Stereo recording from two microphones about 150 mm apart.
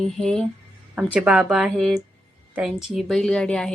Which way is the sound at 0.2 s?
5° left (ahead or behind).